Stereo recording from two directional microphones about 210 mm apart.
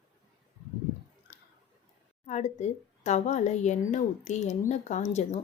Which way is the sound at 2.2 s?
35° left (ahead or behind).